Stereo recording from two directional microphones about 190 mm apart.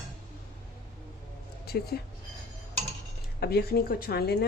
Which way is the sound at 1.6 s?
55° left (ahead or behind).